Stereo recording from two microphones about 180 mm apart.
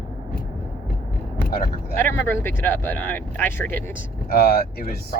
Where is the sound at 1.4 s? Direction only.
55° left (ahead or behind).